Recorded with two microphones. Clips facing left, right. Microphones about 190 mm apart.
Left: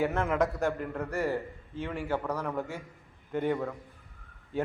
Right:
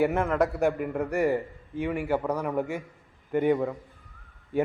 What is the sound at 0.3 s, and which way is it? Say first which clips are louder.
Speech: right 3 dB; centre (ahead or behind).